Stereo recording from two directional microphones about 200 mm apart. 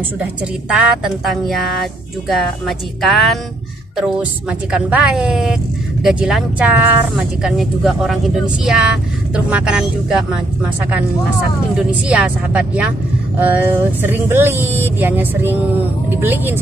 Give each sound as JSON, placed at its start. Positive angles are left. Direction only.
{"t": 0.7, "sound": "speech", "side_deg": -5}
{"t": 11.7, "sound": "speech", "side_deg": -5}